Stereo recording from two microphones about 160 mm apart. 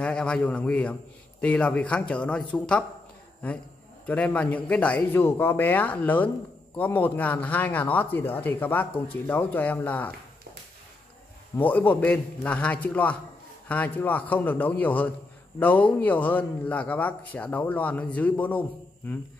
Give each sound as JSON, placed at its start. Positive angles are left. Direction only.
{"t": 0.0, "sound": "a man's voice", "side_deg": 5}
{"t": 4.0, "sound": "a man's voice", "side_deg": 10}
{"t": 11.5, "sound": "a man's voice", "side_deg": 10}